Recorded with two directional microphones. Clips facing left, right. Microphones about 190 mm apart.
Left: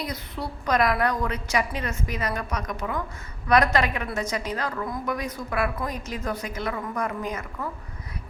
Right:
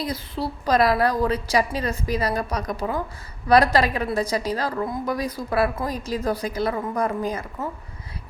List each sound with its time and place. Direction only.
0.0 s a woman's voice: 30° right (ahead or behind)